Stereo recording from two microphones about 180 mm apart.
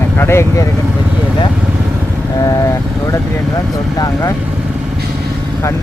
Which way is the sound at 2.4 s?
20° left (ahead or behind).